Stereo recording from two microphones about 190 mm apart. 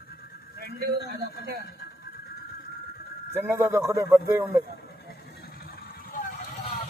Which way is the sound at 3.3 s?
10° right (ahead or behind).